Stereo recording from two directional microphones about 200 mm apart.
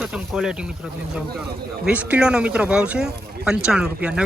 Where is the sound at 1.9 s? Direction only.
5° right (ahead or behind).